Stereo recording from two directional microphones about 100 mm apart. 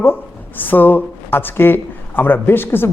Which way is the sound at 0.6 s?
20° left (ahead or behind).